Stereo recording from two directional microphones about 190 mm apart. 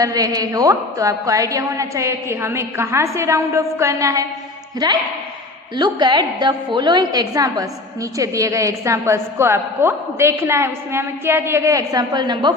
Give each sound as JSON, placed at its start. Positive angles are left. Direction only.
{"t": 0.0, "sound": "a woman's voice", "side_deg": -20}
{"t": 5.7, "sound": "a woman's voice", "side_deg": -25}